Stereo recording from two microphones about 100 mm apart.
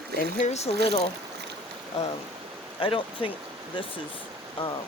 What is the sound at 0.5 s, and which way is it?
Speech, 90° left.